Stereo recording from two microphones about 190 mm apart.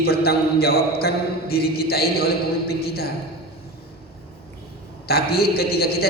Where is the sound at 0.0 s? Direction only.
55° left (ahead or behind).